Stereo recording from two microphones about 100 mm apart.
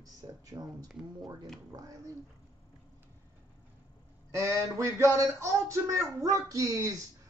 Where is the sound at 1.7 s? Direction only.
40° right (ahead or behind).